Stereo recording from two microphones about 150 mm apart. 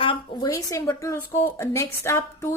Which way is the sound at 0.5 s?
20° left (ahead or behind).